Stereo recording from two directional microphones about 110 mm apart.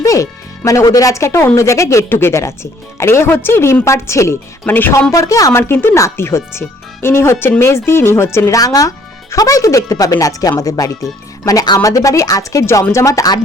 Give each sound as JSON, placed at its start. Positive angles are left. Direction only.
{"t": 0.0, "sound": "speech", "side_deg": 30}
{"t": 5.1, "sound": "speech", "side_deg": 30}